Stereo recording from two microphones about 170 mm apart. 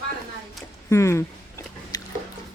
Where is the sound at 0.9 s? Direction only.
15° left (ahead or behind).